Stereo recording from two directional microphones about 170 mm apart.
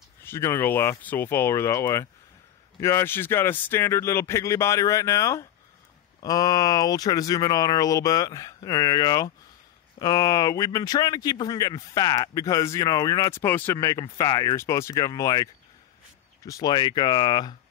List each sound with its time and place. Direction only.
0.2 s speech: 15° left (ahead or behind)